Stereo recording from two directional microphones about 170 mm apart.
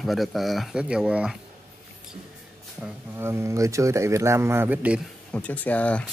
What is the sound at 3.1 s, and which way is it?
A man's voice, 15° right (ahead or behind).